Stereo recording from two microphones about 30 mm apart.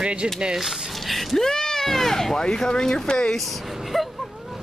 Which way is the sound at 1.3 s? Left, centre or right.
Centre.